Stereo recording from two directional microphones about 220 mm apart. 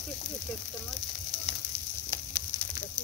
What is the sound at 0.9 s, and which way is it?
Frying, 5° left (ahead or behind).